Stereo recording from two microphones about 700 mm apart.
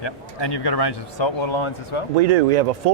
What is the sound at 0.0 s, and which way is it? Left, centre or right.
Speech, left.